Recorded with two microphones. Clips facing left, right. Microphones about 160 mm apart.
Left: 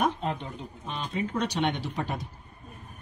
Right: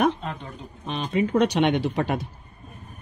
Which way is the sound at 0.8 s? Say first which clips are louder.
Right 8 dB; 70° right (ahead or behind).